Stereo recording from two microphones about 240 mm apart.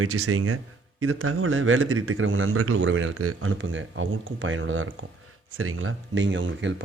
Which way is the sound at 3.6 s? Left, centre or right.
Right.